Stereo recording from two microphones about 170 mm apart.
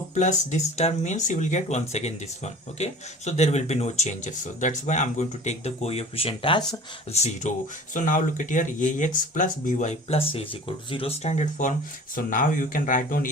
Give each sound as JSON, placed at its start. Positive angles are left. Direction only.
{"t": 0.1, "sound": "speech", "side_deg": 45}